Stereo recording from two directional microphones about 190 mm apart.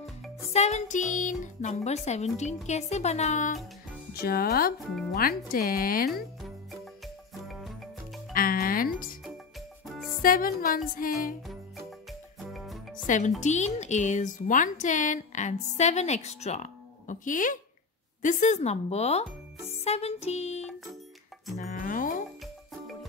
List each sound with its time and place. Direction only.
0.5 s speech: 35° left (ahead or behind)
4.1 s speech: 55° left (ahead or behind)
6.4 s music: centre (ahead or behind)
8.3 s music: 50° left (ahead or behind)
10.2 s speech: 50° left (ahead or behind)
11.4 s music: centre (ahead or behind)
12.9 s speech: 40° left (ahead or behind)
21.5 s music: 40° left (ahead or behind)